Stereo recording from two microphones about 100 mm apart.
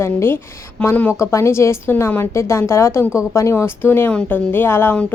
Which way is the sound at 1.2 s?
30° left (ahead or behind).